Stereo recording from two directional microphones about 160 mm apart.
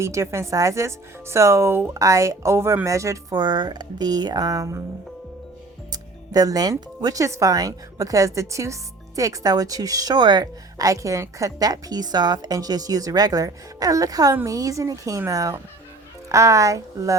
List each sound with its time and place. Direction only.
0.0 s speech: 20° right (ahead or behind)
5.9 s speech: 25° right (ahead or behind)